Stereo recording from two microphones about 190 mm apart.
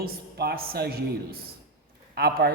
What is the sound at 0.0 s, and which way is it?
A man's voice, 55° right (ahead or behind).